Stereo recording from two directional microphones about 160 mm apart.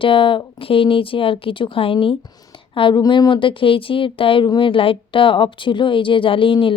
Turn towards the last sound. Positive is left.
turn(degrees=30)  # may be behind; listen again after turning